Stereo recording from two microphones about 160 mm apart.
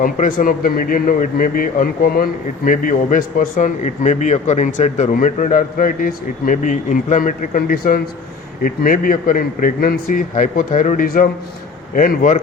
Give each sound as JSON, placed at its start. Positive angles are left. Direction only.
{"t": 0.0, "sound": "a man's voice", "side_deg": 60}